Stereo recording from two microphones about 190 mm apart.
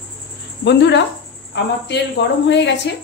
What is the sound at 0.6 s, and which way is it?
Speech, 65° left (ahead or behind).